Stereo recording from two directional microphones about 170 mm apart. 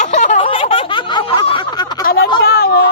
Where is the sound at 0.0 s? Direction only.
45° left (ahead or behind).